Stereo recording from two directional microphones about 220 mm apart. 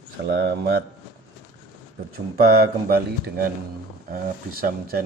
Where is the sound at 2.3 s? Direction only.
45° right (ahead or behind).